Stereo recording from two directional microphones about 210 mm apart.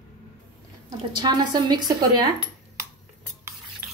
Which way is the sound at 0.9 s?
20° right (ahead or behind).